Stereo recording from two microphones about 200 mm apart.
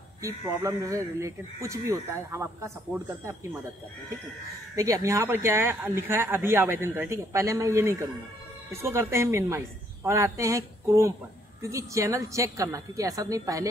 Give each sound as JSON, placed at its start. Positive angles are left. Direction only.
{"t": 0.2, "sound": "speech", "side_deg": -15}
{"t": 4.7, "sound": "speech", "side_deg": -15}